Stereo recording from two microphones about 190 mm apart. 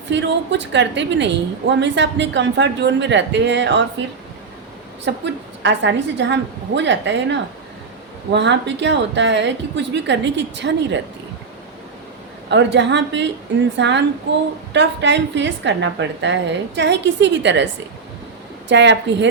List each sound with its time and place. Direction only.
0.1 s a woman's voice: 70° right (ahead or behind)
5.0 s a woman's voice: 70° right (ahead or behind)
12.5 s a woman's voice: 70° right (ahead or behind)
18.7 s a woman's voice: 70° right (ahead or behind)